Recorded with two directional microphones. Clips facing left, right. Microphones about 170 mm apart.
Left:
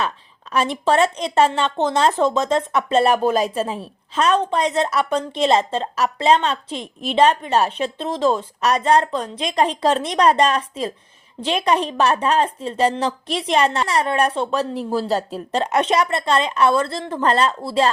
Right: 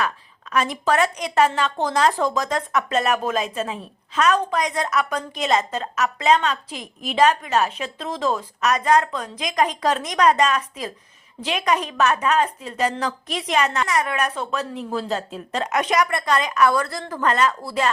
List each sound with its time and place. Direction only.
0.5 s speech: 30° left (ahead or behind)